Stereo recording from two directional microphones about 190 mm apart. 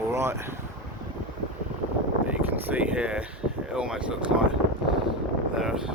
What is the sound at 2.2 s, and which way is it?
Speech, 10° right (ahead or behind).